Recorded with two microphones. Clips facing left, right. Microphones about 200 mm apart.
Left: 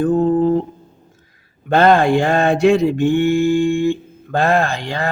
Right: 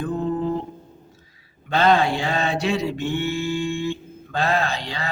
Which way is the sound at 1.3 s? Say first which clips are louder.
Left 8 dB; 50° left (ahead or behind).